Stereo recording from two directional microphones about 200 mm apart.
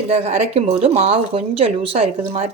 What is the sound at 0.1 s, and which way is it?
A woman's voice, 35° right (ahead or behind).